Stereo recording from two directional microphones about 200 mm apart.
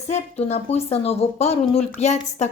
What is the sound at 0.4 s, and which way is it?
Speech, 30° left (ahead or behind).